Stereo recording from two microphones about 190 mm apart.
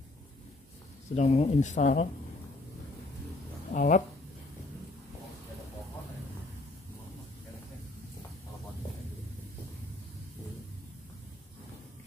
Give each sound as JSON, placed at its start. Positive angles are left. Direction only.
{"t": 1.1, "sound": "speech", "side_deg": 35}
{"t": 3.7, "sound": "speech", "side_deg": 45}